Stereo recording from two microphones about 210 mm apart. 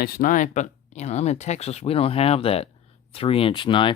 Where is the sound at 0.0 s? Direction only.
40° left (ahead or behind).